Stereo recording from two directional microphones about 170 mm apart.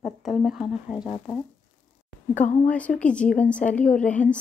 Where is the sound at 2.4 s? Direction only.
50° left (ahead or behind).